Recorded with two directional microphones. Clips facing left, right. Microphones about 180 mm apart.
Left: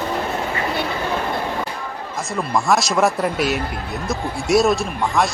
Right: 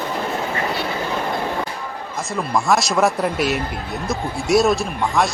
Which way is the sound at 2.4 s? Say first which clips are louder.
Even; centre (ahead or behind).